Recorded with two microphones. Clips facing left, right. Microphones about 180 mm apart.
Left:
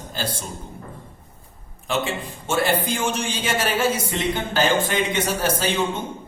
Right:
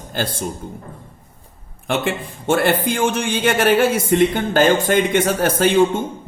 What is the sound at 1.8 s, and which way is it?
A man's voice, 60° right (ahead or behind).